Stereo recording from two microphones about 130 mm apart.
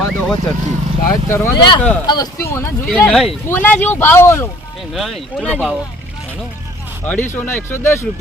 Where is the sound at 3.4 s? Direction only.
15° left (ahead or behind).